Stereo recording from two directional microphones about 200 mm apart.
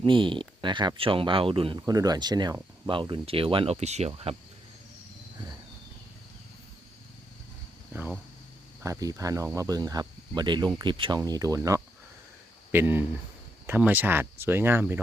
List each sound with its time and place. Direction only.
0.0 s speech: 25° right (ahead or behind)
7.9 s speech: 10° right (ahead or behind)